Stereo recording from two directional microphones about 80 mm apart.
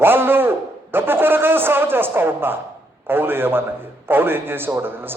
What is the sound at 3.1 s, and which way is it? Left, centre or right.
A man's voice, right.